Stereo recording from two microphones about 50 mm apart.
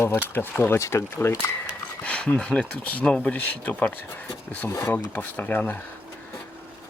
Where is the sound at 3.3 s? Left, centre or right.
Left.